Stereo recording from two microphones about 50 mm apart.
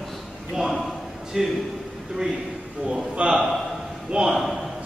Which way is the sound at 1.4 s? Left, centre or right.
Centre.